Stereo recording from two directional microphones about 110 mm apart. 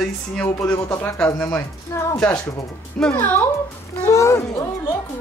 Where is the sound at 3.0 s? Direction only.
15° left (ahead or behind).